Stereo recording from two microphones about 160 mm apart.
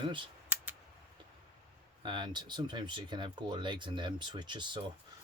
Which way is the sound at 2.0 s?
30° right (ahead or behind).